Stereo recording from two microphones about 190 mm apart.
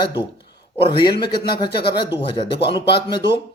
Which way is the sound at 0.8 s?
25° left (ahead or behind).